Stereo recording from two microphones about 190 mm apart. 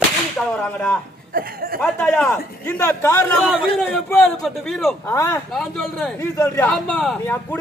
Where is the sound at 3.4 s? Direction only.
Centre (ahead or behind).